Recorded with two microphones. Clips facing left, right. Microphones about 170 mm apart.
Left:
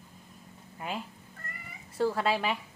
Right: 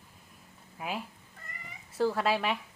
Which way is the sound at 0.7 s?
5° right (ahead or behind).